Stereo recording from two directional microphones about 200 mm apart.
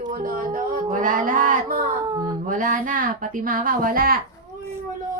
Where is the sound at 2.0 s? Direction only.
20° right (ahead or behind).